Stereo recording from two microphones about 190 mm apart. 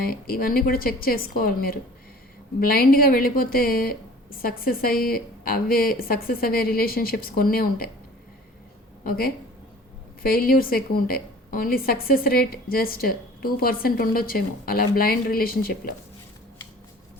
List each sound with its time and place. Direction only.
0.0 s a woman's voice: 50° left (ahead or behind)
9.0 s a woman's voice: 50° left (ahead or behind)